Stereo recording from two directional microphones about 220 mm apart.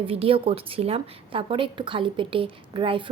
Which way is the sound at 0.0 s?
25° right (ahead or behind).